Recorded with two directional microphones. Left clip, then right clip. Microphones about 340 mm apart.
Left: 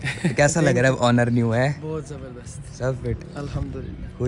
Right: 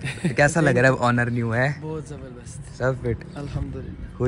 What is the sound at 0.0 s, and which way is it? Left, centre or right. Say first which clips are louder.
Speech: even; centre.